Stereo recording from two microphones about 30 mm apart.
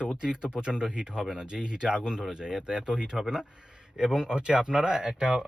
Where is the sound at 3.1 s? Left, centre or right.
Centre.